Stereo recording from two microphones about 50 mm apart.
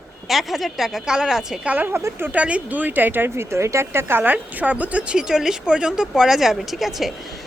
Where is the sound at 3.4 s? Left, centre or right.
Right.